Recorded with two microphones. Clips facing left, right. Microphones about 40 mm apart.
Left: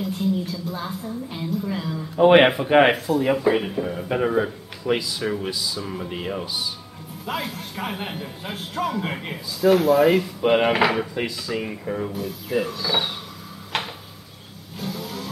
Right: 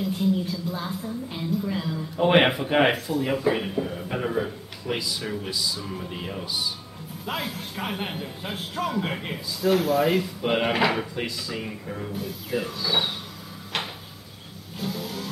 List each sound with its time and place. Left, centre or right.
0.0 s a woman's voice: centre
4.9 s a man's voice: centre
5.3 s a woman's voice: centre
5.6 s a man's voice: centre
5.9 s a woman's voice: centre
6.4 s a man's voice: centre
11.8 s a woman's voice: centre
12.2 s a man's voice: centre
13.7 s a sound: centre
14.8 s vehicle: centre